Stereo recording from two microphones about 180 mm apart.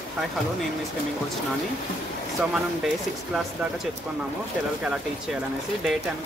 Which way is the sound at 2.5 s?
5° right (ahead or behind).